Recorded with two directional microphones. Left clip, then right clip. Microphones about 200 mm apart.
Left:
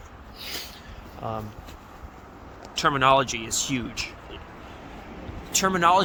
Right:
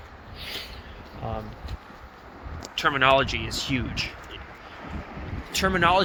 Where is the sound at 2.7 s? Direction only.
10° left (ahead or behind).